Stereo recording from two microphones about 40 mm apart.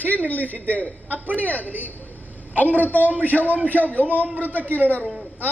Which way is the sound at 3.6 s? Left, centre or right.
Left.